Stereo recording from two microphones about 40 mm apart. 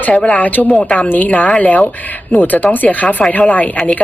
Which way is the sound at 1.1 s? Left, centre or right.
Left.